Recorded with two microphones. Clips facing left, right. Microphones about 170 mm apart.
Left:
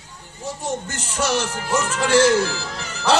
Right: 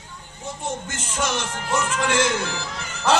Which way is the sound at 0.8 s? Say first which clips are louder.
Left 2 dB; 40° left (ahead or behind).